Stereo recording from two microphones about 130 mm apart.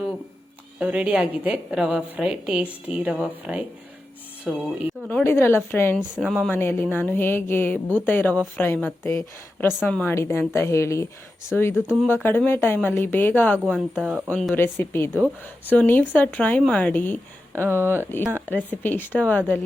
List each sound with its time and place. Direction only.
0.8 s a woman's voice: 10° right (ahead or behind)
5.0 s speech: 15° left (ahead or behind)
6.0 s speech: 5° right (ahead or behind)
6.5 s speech: 15° left (ahead or behind)
10.2 s a woman's voice: 20° left (ahead or behind)
11.7 s a woman's voice: 5° right (ahead or behind)
12.0 s speech: 15° left (ahead or behind)
13.7 s speech: 5° right (ahead or behind)
14.5 s speech: 15° left (ahead or behind)
17.5 s a woman's voice: 20° right (ahead or behind)
18.7 s speech: 15° left (ahead or behind)